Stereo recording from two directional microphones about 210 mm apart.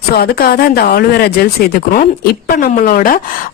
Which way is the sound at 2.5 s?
45° left (ahead or behind).